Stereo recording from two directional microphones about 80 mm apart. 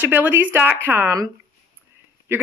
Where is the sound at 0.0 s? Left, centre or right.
Right.